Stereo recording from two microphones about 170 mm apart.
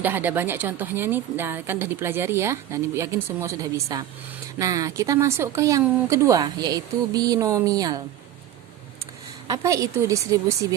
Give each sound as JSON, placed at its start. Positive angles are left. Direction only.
{"t": 0.0, "sound": "speech", "side_deg": -10}
{"t": 9.5, "sound": "speech", "side_deg": -20}